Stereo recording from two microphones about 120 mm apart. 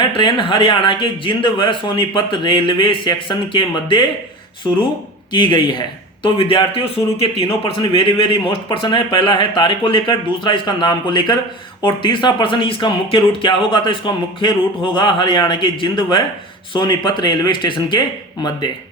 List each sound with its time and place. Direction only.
0.1 s speech: 45° left (ahead or behind)
5.3 s speech: 40° left (ahead or behind)